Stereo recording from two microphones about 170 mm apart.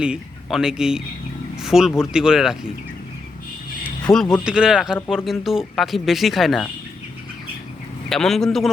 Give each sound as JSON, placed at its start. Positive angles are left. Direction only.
{"t": 0.0, "sound": "speech", "side_deg": -5}
{"t": 4.1, "sound": "speech", "side_deg": 20}
{"t": 4.4, "sound": "speech", "side_deg": -5}
{"t": 8.1, "sound": "speech", "side_deg": 0}